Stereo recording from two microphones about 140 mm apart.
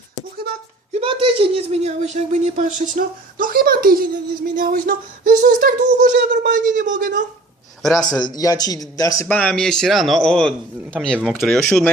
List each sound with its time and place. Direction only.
0.9 s a woman's voice: 40° right (ahead or behind); by 4.1 s 90° right
4.5 s a sound: 90° right
6.5 s speech: 70° right (ahead or behind)
7.8 s a man's voice: centre (ahead or behind)
8.2 s a man's voice: 25° left (ahead or behind)
9.2 s speech: 10° left (ahead or behind)